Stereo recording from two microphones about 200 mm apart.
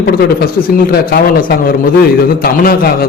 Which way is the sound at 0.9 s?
45° left (ahead or behind).